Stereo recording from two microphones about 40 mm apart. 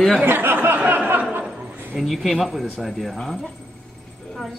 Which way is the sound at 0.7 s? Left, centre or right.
Right.